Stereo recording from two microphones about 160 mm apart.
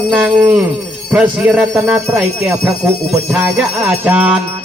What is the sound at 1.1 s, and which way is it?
Speech, 5° right (ahead or behind).